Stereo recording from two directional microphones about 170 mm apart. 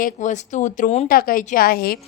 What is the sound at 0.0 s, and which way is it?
A woman's voice, 45° left (ahead or behind).